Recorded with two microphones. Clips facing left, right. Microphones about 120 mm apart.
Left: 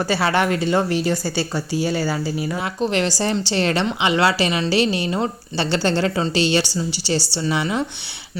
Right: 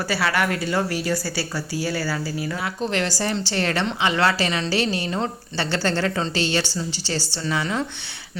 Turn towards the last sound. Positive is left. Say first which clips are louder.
# left 3 dB
turn(degrees=15)  # may be behind; listen again after turning